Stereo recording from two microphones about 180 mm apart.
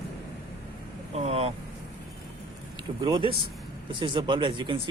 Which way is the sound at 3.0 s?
25° right (ahead or behind).